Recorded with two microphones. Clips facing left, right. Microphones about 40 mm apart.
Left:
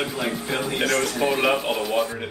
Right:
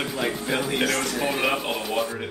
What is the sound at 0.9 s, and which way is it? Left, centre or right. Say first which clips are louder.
Speech: left 3 dB; centre.